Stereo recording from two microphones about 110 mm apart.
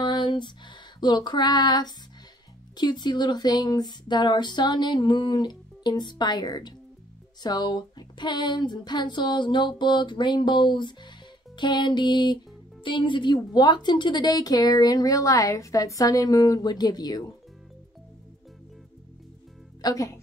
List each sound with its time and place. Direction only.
0.0 s female singing: 45° left (ahead or behind)
2.8 s a woman's voice: 40° left (ahead or behind)
19.8 s a woman's voice: 30° left (ahead or behind)